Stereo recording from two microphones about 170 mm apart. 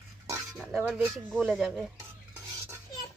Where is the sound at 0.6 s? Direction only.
5° right (ahead or behind).